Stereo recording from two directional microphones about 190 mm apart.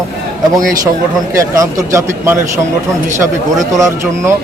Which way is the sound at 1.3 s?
15° right (ahead or behind).